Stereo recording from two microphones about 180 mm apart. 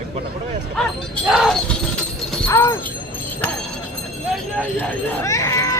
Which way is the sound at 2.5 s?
15° left (ahead or behind).